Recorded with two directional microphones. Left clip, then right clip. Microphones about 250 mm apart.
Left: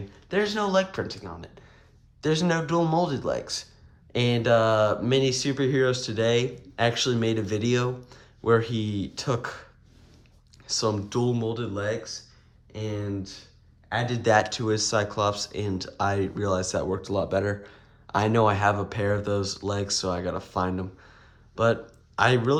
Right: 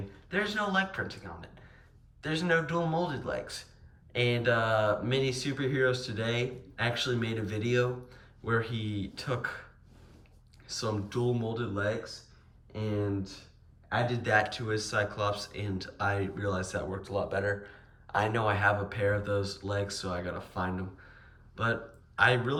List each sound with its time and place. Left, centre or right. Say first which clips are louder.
0.3 s speech: left 6 dB; centre
2.2 s speech: left 4 dB; centre
10.7 s speech: left 8 dB; centre